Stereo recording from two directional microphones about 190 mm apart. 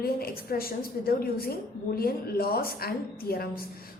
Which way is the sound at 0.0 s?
50° left (ahead or behind).